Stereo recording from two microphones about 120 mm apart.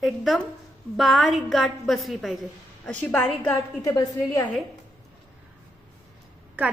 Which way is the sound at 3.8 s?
25° left (ahead or behind).